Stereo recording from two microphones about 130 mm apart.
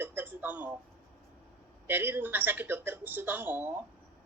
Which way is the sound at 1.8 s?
15° right (ahead or behind).